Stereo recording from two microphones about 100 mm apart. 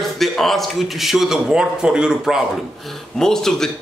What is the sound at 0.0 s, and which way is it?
Speech, centre (ahead or behind).